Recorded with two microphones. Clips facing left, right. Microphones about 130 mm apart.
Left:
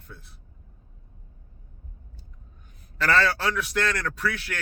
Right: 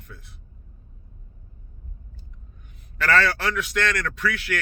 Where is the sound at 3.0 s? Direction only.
30° left (ahead or behind).